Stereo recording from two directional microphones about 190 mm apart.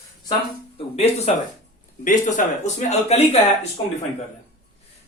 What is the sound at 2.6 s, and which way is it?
Speech, 35° left (ahead or behind).